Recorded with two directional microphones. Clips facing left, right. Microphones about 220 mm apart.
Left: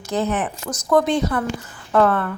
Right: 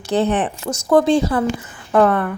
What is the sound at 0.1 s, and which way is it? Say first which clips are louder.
Speech: right 4 dB; 30° right (ahead or behind).